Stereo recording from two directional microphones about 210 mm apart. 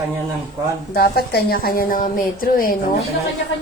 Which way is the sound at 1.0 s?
50° left (ahead or behind).